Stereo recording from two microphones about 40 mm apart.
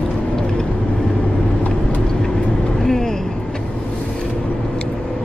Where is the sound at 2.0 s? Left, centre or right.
Centre.